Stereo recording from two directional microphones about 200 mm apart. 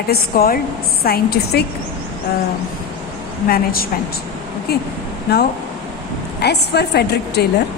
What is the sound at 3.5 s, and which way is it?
A woman's voice, 50° left (ahead or behind).